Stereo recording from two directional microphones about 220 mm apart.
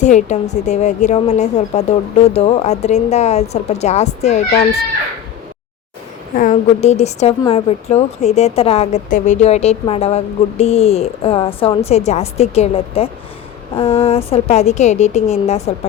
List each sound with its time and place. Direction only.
0.0 s a woman's voice: 30° left (ahead or behind)
6.3 s a woman's voice: 35° left (ahead or behind)